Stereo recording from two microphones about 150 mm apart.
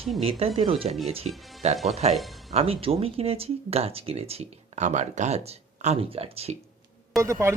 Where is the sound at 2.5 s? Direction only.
40° right (ahead or behind).